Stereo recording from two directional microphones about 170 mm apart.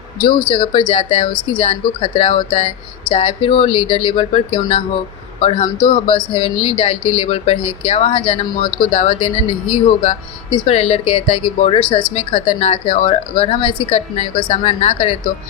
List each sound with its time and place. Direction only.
0.4 s speech: 30° left (ahead or behind)